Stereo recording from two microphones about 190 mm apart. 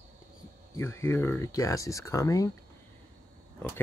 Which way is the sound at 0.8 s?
15° left (ahead or behind).